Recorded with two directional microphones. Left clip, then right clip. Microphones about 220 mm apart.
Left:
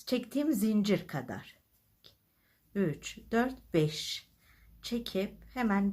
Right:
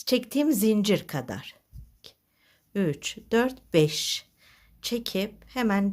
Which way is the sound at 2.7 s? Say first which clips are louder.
Right 6 dB; 40° right (ahead or behind).